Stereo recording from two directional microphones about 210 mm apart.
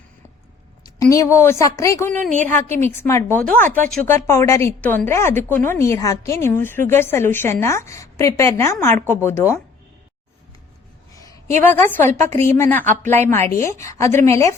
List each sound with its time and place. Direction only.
1.0 s a woman's voice: 15° left (ahead or behind)
11.2 s a sound: 15° left (ahead or behind)
11.6 s a woman's voice: 10° left (ahead or behind)